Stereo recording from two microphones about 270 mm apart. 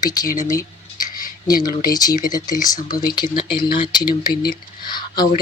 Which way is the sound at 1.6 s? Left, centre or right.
Centre.